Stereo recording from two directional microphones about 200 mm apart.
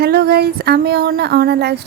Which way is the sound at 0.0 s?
55° right (ahead or behind).